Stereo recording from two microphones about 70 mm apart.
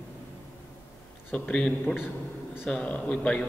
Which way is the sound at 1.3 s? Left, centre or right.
Centre.